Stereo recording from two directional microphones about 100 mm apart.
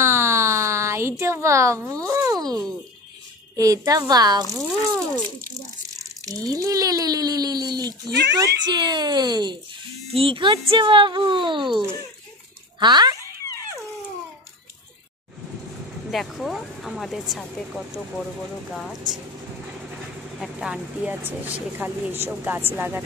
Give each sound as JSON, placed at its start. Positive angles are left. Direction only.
{"t": 0.0, "sound": "a sound", "side_deg": -25}
{"t": 3.5, "sound": "speech", "side_deg": -35}
{"t": 6.2, "sound": "speech", "side_deg": -40}
{"t": 8.6, "sound": "speech", "side_deg": -45}
{"t": 10.1, "sound": "speech", "side_deg": -60}
{"t": 16.1, "sound": "speech", "side_deg": 0}
{"t": 20.3, "sound": "speech", "side_deg": 0}